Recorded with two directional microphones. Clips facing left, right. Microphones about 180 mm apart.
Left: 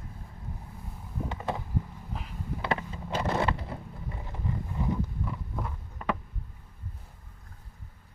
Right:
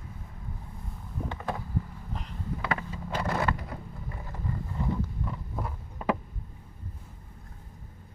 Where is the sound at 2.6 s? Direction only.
25° left (ahead or behind).